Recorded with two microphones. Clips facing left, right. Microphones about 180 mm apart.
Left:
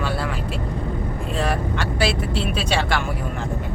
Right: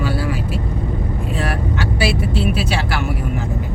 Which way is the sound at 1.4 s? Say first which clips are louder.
Even; 5° right (ahead or behind).